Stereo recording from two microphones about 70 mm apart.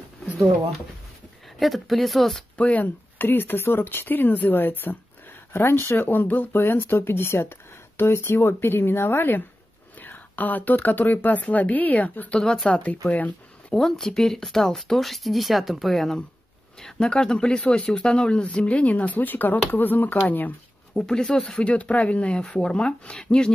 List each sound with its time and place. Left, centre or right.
1.6 s speech: centre
2.5 s speech: left
12.4 s speech: centre
12.6 s speech: centre
13.1 s a sound: left
13.7 s speech: centre; by 21.0 s left
21.0 s speech: centre